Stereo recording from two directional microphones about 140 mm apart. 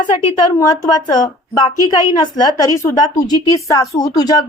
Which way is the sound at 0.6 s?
25° left (ahead or behind).